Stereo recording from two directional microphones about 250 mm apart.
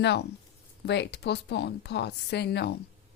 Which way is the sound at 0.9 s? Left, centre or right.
Left.